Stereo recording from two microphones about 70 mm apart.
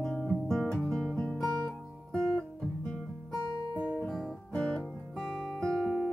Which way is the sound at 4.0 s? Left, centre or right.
Centre.